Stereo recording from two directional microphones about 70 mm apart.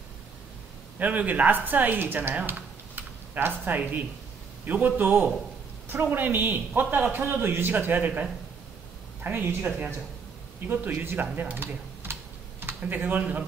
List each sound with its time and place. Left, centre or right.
0.9 s a man's voice: right
9.2 s speech: right
11.0 s a man's voice: right
11.3 s typing: right